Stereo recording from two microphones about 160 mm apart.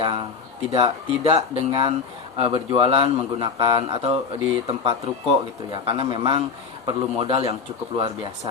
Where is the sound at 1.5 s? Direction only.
35° right (ahead or behind).